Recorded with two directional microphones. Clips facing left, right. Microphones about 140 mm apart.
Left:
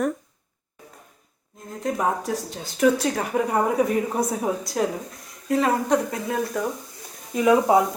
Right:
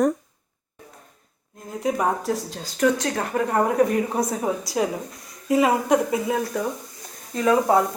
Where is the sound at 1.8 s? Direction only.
5° right (ahead or behind).